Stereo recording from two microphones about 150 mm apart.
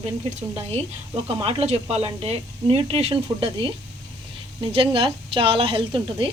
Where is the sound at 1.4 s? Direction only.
40° right (ahead or behind).